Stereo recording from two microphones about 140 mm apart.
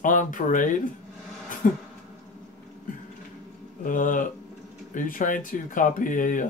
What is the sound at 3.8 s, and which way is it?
Speech, 70° left (ahead or behind).